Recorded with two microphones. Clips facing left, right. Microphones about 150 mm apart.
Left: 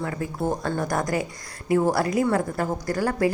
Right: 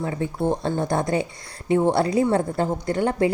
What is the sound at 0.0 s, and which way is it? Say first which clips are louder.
Speech: right 3 dB; 25° right (ahead or behind).